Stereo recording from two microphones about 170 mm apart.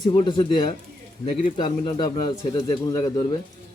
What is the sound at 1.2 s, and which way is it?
Speech, 40° left (ahead or behind).